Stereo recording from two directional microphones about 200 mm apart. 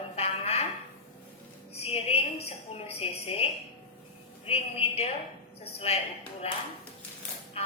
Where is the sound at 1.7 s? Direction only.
30° left (ahead or behind).